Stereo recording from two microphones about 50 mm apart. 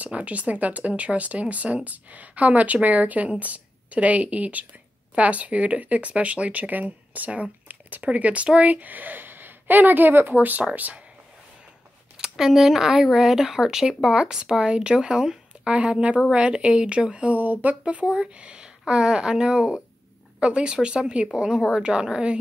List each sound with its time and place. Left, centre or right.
0.0 s speech: right
12.2 s speech: centre; by 17.3 s right
17.3 s speech: right; by 22.4 s centre